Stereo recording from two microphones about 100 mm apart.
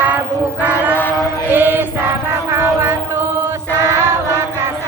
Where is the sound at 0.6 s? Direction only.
15° right (ahead or behind).